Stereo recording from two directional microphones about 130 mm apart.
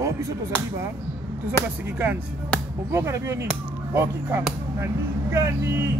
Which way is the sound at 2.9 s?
20° right (ahead or behind).